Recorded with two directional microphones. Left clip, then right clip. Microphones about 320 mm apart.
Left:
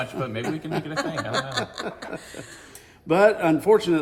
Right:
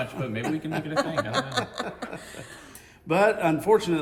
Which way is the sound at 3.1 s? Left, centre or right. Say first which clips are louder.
Left 3 dB; centre.